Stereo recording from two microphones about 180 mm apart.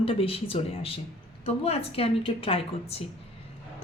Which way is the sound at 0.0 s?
30° left (ahead or behind).